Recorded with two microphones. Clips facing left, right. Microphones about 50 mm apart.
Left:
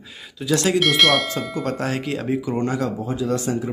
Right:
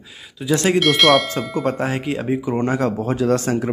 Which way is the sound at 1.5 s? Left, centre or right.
Centre.